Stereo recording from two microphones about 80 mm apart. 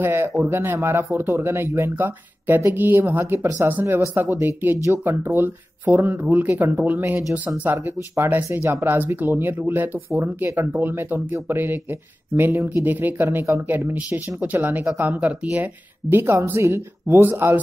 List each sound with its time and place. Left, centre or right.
0.0 s a woman's voice: right
4.1 s speech: right
8.8 s a woman's voice: right